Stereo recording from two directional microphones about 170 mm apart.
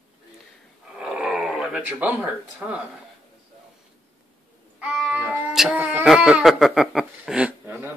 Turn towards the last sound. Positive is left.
turn(degrees=-10)  # may be behind; listen again after turning